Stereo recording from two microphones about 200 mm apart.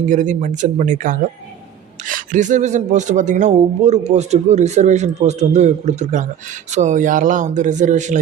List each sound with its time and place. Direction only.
0.1 s speech: 40° right (ahead or behind)